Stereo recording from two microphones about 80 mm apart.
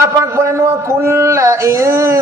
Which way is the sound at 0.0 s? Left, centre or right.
Right.